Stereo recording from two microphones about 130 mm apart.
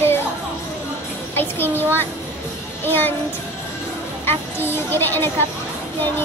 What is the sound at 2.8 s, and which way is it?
Speech, 15° left (ahead or behind).